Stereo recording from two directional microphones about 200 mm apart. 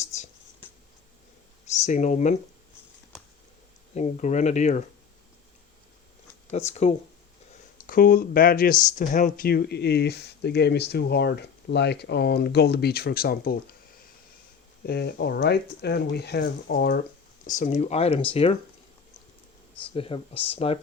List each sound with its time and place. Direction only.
0.0 s writing: 35° left (ahead or behind)
1.6 s speech: 35° left (ahead or behind)
3.9 s speech: 35° left (ahead or behind)
6.5 s speech: 35° left (ahead or behind)
7.8 s speech: 45° left (ahead or behind)
14.8 s speech: 55° left (ahead or behind); by 18.5 s 30° left (ahead or behind)
19.9 s speech: 25° left (ahead or behind)